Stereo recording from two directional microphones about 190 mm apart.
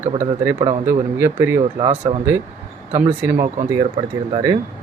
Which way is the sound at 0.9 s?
15° right (ahead or behind).